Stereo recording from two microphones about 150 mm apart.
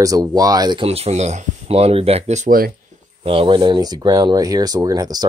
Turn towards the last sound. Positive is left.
turn(degrees=-25)  # may be behind; listen again after turning